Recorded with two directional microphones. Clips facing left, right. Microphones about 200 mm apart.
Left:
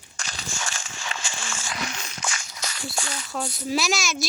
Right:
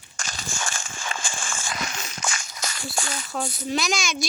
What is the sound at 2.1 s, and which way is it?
Walk, 50° right (ahead or behind).